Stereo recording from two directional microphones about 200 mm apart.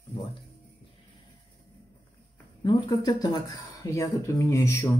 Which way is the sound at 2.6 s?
20° left (ahead or behind).